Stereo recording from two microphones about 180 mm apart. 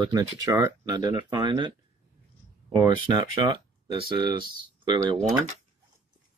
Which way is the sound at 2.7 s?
20° right (ahead or behind).